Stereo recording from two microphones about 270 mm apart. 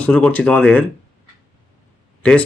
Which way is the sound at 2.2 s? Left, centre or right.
Centre.